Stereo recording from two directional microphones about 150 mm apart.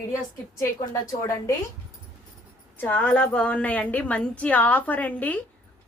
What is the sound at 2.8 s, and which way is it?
A woman's voice, 10° left (ahead or behind).